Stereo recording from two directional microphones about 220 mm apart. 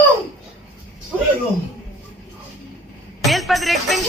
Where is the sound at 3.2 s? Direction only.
Centre (ahead or behind).